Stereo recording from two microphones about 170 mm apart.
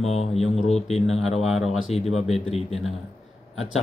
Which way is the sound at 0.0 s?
40° left (ahead or behind).